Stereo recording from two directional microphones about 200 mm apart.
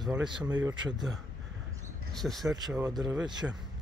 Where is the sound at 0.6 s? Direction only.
20° right (ahead or behind).